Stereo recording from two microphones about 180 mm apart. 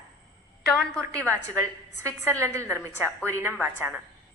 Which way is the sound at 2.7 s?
10° right (ahead or behind).